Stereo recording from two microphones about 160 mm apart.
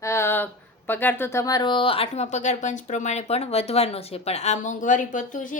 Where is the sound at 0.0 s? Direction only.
15° left (ahead or behind).